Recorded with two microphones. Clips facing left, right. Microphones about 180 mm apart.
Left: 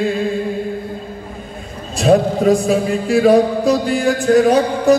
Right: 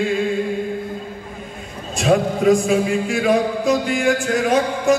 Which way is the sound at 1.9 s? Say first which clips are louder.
Left 4 dB; 35° left (ahead or behind).